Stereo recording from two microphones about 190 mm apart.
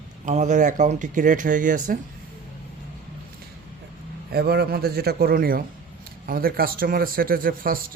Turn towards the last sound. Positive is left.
turn(degrees=-50)  # may be behind; listen again after turning